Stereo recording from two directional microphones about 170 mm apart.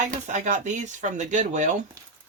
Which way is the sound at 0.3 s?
45° right (ahead or behind).